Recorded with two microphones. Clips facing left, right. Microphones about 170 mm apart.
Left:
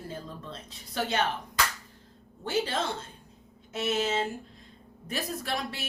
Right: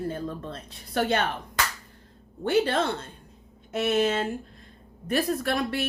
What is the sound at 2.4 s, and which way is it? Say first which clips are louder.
Speech: right 6 dB; 60° right (ahead or behind).